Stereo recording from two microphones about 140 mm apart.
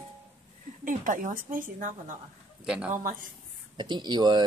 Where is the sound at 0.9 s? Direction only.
70° right (ahead or behind).